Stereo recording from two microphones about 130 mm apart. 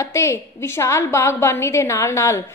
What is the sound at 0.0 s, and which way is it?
A woman's voice, 20° left (ahead or behind).